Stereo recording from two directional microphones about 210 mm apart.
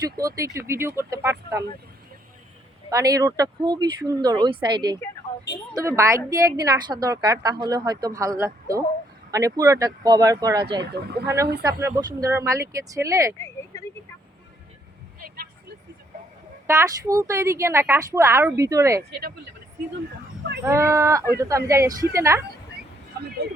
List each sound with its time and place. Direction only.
0.2 s a woman's voice: 15° right (ahead or behind)
2.9 s a woman's voice: 15° right (ahead or behind)
10.8 s speech: 50° right (ahead or behind)
11.6 s a woman's voice: 15° right (ahead or behind)
13.7 s vehicle: 15° left (ahead or behind)
16.6 s a woman's voice: 15° right (ahead or behind)
20.7 s a woman's voice: 15° right (ahead or behind)